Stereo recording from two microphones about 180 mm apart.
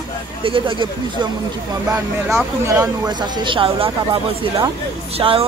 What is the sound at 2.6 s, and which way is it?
Speech, 20° right (ahead or behind).